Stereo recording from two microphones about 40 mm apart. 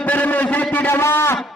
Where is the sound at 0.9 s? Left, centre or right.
Left.